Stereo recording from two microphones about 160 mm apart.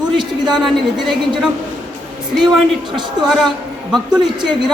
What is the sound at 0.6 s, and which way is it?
Speech, centre (ahead or behind).